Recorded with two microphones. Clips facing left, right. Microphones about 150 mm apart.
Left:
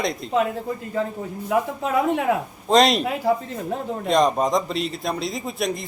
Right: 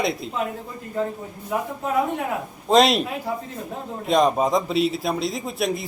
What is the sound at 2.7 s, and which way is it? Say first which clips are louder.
Speech: even; centre (ahead or behind).